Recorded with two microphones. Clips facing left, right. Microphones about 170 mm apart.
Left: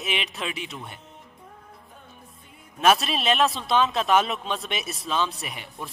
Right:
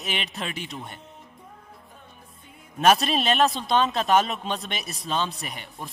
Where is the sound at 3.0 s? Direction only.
Centre (ahead or behind).